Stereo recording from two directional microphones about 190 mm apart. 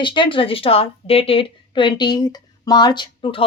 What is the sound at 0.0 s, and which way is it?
Speech, 25° left (ahead or behind).